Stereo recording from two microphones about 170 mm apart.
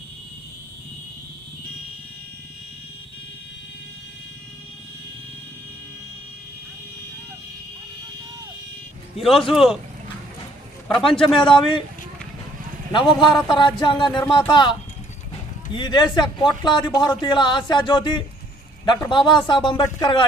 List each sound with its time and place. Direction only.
9.4 s speech: centre (ahead or behind)
11.0 s speech: 30° left (ahead or behind)
13.1 s speech: centre (ahead or behind)
13.5 s speech: 25° left (ahead or behind)